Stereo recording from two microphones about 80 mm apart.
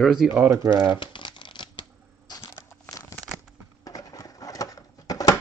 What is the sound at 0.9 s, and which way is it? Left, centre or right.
Shuffling cards, left.